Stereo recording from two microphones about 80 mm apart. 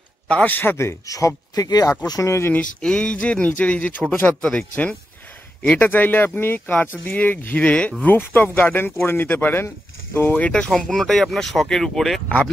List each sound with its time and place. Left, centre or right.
0.3 s speech: centre; by 2.5 s left
2.5 s speech: centre
10.5 s speech: centre